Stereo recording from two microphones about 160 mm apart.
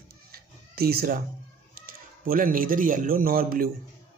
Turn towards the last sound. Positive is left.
turn(degrees=-65)  # may be behind; listen again after turning